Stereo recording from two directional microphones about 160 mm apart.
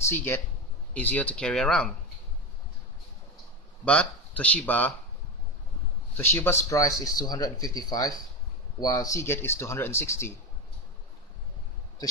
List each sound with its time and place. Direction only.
0.0 s a man's voice: 15° left (ahead or behind)
3.8 s speech: 10° left (ahead or behind)
6.1 s speech: 15° left (ahead or behind)